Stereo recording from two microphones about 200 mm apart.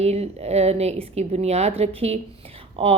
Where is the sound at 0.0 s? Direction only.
30° right (ahead or behind).